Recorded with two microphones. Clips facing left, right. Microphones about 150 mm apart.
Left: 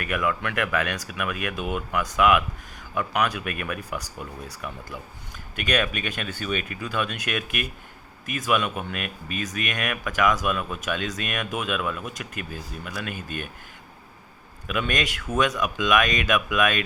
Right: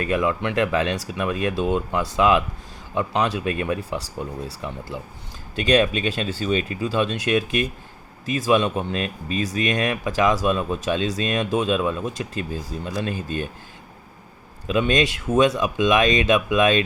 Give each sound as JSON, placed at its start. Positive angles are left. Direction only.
{"t": 0.0, "sound": "speech", "side_deg": -30}
{"t": 14.7, "sound": "speech", "side_deg": -25}